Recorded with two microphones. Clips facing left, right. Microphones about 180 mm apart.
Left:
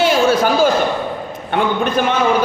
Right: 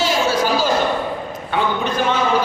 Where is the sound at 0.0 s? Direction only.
55° left (ahead or behind).